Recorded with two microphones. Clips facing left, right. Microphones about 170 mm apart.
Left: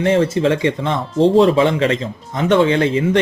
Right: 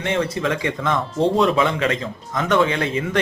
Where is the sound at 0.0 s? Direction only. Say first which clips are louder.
Left 7 dB; 35° left (ahead or behind).